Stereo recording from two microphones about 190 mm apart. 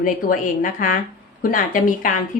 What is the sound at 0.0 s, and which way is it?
A woman's voice, 45° left (ahead or behind).